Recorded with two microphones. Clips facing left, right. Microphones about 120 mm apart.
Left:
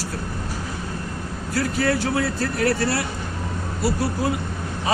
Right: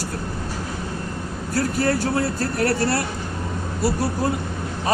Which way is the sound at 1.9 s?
45° right (ahead or behind).